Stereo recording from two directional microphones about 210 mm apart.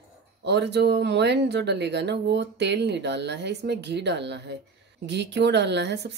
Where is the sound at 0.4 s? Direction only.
55° right (ahead or behind).